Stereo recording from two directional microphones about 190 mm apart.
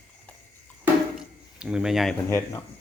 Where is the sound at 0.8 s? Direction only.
5° right (ahead or behind).